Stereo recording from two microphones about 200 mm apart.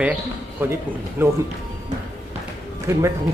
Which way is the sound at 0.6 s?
10° right (ahead or behind).